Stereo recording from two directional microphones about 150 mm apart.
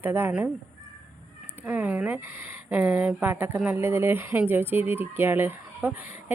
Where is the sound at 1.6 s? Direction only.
10° right (ahead or behind).